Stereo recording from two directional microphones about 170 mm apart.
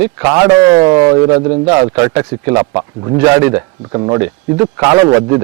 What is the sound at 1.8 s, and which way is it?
A man's voice, 15° right (ahead or behind).